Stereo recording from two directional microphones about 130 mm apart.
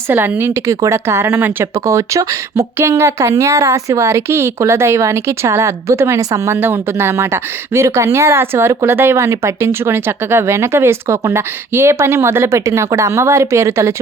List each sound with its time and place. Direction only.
0.1 s speech: 20° right (ahead or behind)